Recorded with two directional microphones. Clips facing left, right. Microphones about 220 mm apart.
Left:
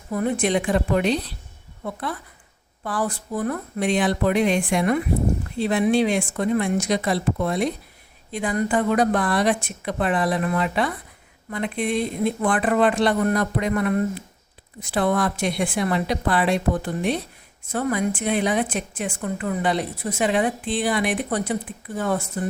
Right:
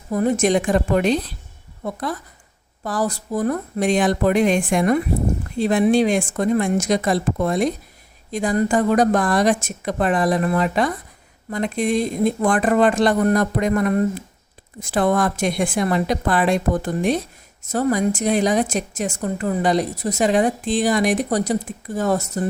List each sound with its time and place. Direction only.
0.1 s a woman's voice: 40° right (ahead or behind)